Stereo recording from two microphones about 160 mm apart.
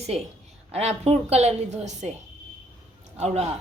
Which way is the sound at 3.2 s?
40° right (ahead or behind).